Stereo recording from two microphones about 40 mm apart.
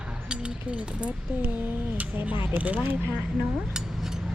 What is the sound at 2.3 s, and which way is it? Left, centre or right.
Speech, right.